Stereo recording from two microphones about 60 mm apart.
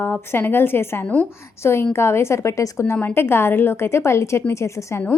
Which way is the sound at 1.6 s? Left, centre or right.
Left.